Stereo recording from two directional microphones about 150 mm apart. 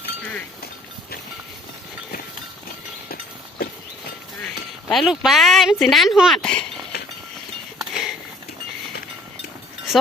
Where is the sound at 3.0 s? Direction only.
75° left (ahead or behind).